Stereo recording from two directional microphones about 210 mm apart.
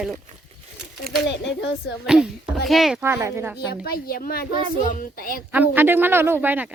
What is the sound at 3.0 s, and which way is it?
Speech, 10° right (ahead or behind).